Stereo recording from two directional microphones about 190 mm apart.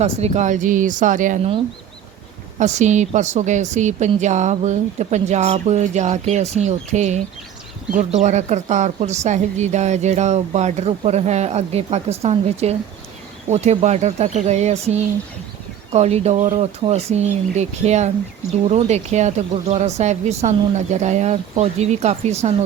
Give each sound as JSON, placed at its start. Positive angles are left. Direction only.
{"t": 0.0, "sound": "a woman's voice", "side_deg": -35}